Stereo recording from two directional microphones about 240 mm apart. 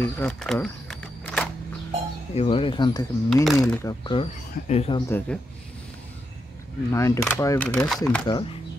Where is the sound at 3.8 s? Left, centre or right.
Centre.